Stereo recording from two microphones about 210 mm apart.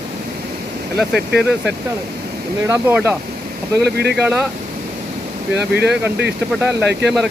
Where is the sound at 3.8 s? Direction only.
50° right (ahead or behind).